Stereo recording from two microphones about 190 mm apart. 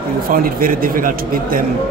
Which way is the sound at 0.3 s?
50° right (ahead or behind).